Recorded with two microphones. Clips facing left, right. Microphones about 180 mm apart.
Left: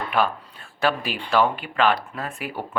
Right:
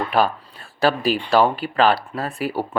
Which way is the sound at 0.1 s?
35° right (ahead or behind).